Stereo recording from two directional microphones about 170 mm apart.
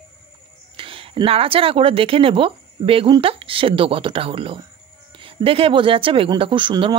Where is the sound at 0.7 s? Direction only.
30° right (ahead or behind).